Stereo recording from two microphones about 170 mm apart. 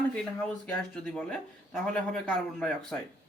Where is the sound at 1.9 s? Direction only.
5° left (ahead or behind).